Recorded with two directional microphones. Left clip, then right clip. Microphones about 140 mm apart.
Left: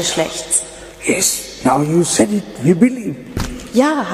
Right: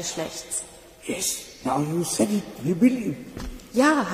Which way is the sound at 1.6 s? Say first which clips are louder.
Left 11 dB; 25° left (ahead or behind).